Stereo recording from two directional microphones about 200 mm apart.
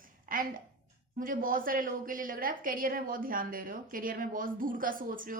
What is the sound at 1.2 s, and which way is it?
A woman's voice, 45° right (ahead or behind).